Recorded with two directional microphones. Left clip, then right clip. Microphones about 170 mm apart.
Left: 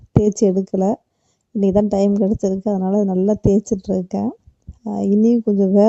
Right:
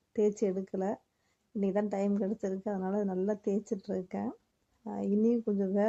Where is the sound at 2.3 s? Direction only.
25° left (ahead or behind).